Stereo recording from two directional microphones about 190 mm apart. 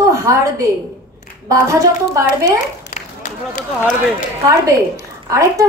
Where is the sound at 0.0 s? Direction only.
15° right (ahead or behind).